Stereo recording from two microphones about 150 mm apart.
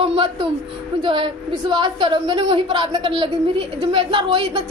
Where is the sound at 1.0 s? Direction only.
35° right (ahead or behind).